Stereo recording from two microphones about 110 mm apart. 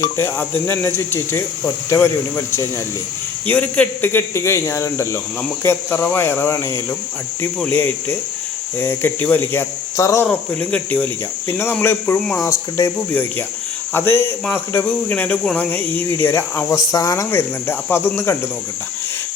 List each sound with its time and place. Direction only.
0.2 s speech: 20° left (ahead or behind)
10.2 s speech: 10° left (ahead or behind)
12.4 s speech: 30° left (ahead or behind)
13.9 s speech: 20° left (ahead or behind)
17.3 s speech: 20° left (ahead or behind)